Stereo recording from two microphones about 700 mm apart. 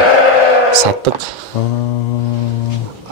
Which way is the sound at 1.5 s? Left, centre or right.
Left.